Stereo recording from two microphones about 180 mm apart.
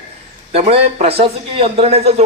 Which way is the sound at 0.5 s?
35° right (ahead or behind).